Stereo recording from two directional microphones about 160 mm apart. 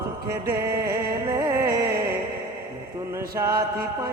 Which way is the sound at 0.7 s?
75° right (ahead or behind).